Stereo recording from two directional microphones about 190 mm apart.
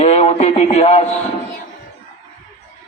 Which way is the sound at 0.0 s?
35° left (ahead or behind).